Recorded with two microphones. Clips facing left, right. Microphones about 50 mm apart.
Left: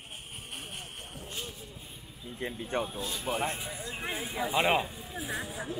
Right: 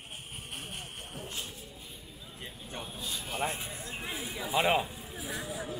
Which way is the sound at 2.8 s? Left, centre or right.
Centre.